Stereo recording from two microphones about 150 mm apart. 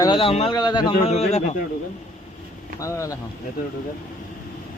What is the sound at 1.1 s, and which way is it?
Speech, 45° left (ahead or behind).